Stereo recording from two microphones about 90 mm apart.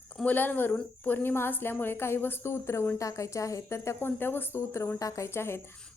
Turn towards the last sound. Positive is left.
turn(degrees=30)  # may be behind; listen again after turning